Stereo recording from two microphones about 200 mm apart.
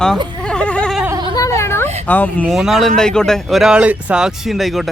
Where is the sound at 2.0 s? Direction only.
10° left (ahead or behind).